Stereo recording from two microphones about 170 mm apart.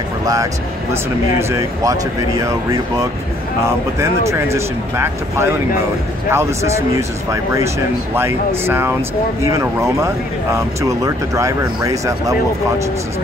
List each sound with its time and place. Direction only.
1.4 s speech: 15° right (ahead or behind)
3.6 s speech: 15° right (ahead or behind)